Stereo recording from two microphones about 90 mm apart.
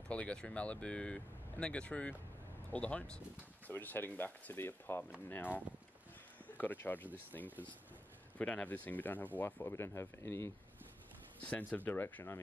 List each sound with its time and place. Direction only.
0.1 s speech: 10° left (ahead or behind)
6.6 s speech: 20° left (ahead or behind)
8.4 s speech: 15° left (ahead or behind); by 10.5 s 30° left (ahead or behind)
11.4 s speech: 15° left (ahead or behind)